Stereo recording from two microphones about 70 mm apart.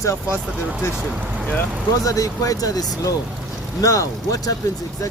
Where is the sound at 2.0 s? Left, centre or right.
Left.